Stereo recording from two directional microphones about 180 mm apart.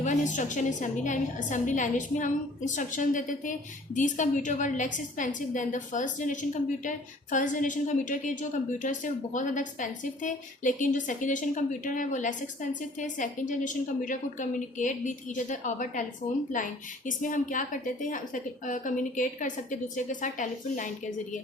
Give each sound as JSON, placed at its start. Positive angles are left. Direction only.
{"t": 0.0, "sound": "a woman's voice", "side_deg": 45}
{"t": 17.1, "sound": "a woman's voice", "side_deg": 45}